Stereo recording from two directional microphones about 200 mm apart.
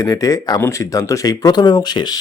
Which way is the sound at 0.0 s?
15° left (ahead or behind).